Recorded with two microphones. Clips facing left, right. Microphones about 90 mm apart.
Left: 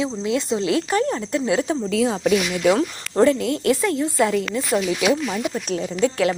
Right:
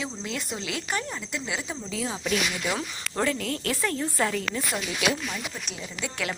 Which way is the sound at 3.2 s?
25° left (ahead or behind).